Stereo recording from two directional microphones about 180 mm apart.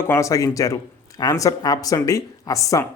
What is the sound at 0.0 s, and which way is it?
Speech, 15° left (ahead or behind).